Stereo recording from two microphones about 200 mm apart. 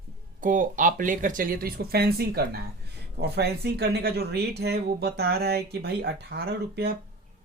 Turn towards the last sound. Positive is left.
turn(degrees=-50)  # may be behind; listen again after turning